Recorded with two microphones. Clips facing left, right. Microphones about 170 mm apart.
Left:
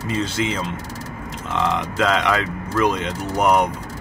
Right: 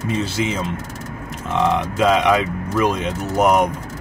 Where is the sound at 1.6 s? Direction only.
10° right (ahead or behind).